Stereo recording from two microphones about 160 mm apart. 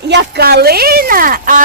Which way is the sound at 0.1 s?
90° right.